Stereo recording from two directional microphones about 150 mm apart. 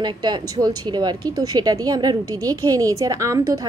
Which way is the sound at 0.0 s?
30° right (ahead or behind).